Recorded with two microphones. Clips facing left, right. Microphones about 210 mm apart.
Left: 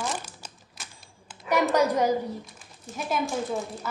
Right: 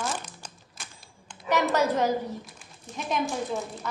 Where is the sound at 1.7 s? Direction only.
10° left (ahead or behind).